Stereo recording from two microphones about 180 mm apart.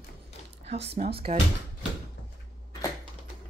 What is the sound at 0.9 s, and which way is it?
Speech, 35° right (ahead or behind).